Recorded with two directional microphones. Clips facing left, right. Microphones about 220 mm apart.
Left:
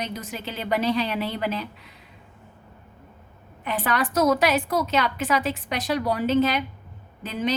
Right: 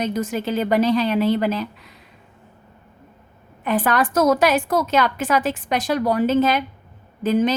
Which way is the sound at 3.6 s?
45° right (ahead or behind).